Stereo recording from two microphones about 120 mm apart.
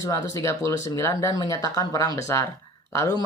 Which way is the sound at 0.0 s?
30° left (ahead or behind).